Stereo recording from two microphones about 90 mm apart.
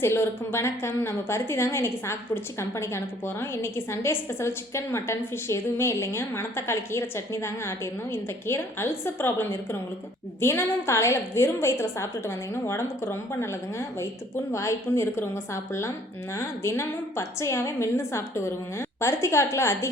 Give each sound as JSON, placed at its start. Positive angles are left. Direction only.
{"t": 0.0, "sound": "a woman's voice", "side_deg": 30}